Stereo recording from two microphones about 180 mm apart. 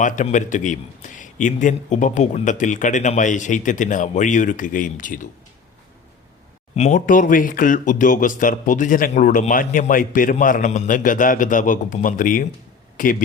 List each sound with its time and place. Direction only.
0.0 s speech: 45° left (ahead or behind)
6.7 s speech: 40° left (ahead or behind)